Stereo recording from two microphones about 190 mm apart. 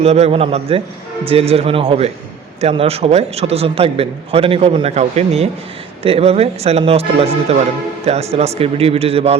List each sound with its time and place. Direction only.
0.0 s a man's voice: 35° right (ahead or behind)